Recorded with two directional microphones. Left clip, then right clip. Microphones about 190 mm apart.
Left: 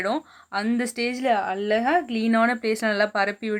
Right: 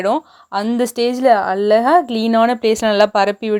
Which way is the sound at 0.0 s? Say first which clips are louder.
Right 9 dB; 25° right (ahead or behind).